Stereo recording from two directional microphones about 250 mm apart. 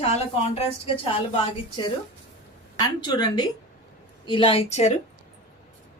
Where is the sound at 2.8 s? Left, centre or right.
Centre.